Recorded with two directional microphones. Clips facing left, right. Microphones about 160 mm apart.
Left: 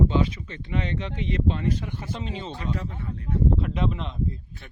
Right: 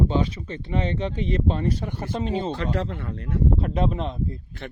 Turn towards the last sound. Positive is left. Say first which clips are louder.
# right 3 dB
turn(degrees=-40)  # may be behind; listen again after turning